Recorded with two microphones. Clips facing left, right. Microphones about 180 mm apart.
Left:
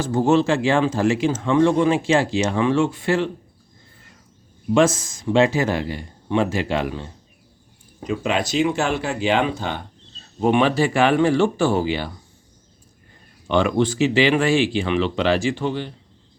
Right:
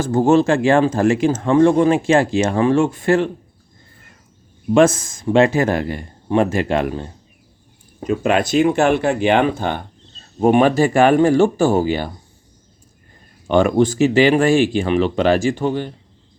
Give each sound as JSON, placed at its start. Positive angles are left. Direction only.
{"t": 0.0, "sound": "speech", "side_deg": -50}
{"t": 4.7, "sound": "speech", "side_deg": -55}
{"t": 13.5, "sound": "speech", "side_deg": -45}